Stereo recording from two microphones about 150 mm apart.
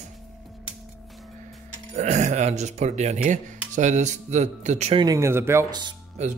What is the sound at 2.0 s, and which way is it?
Speech, 50° right (ahead or behind).